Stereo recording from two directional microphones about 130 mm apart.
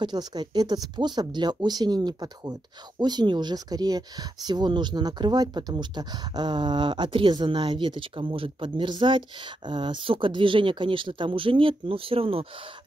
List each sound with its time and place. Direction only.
0.0 s speech: 35° right (ahead or behind)